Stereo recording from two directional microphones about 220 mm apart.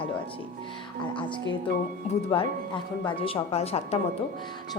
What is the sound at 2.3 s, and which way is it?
A woman's voice, 20° left (ahead or behind).